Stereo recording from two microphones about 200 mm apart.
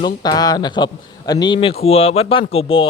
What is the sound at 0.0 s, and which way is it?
A man's voice, 20° left (ahead or behind).